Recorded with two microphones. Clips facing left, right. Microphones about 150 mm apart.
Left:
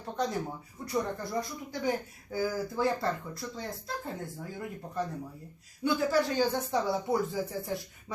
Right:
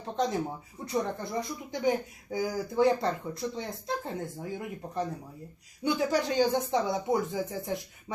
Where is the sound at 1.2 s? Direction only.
20° right (ahead or behind).